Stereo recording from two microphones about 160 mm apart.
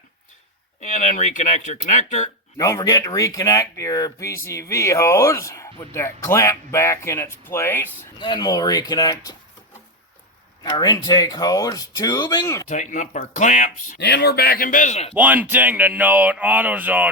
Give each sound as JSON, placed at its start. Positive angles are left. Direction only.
{"t": 0.8, "sound": "speech", "side_deg": 50}
{"t": 2.6, "sound": "speech", "side_deg": 20}
{"t": 8.2, "sound": "speech", "side_deg": 25}
{"t": 10.6, "sound": "speech", "side_deg": 25}
{"t": 12.6, "sound": "speech", "side_deg": 50}
{"t": 14.0, "sound": "a man's voice", "side_deg": 90}
{"t": 15.1, "sound": "speech", "side_deg": -10}